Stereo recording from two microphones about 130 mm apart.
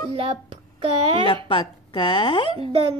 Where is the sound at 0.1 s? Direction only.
45° right (ahead or behind).